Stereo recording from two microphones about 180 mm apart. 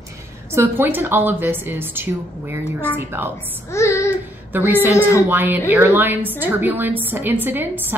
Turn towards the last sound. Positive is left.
turn(degrees=-10)  # may be behind; listen again after turning